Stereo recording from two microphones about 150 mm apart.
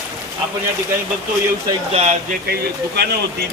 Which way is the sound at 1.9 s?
50° right (ahead or behind).